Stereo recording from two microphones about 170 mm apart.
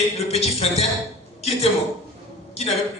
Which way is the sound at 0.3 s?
35° left (ahead or behind).